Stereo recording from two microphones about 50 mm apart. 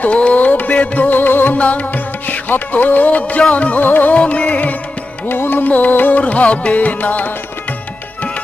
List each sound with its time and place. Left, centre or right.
0.0 s music: left
1.5 s music: left
3.8 s music: left
4.1 s music: left
5.3 s music: left